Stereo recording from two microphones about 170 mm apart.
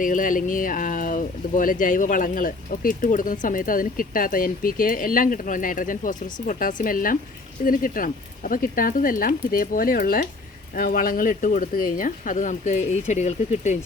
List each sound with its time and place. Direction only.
0.0 s speech: 50° left (ahead or behind)